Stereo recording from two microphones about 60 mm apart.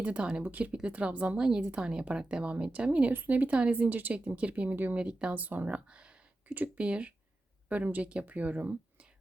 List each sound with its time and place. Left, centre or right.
0.0 s speech: centre
3.1 s speech: right
6.5 s speech: right
6.8 s speech: centre